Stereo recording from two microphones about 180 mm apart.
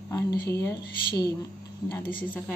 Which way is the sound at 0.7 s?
60° left (ahead or behind).